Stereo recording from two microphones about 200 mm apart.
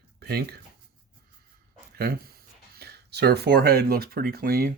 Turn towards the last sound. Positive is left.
turn(degrees=-50)  # may be behind; listen again after turning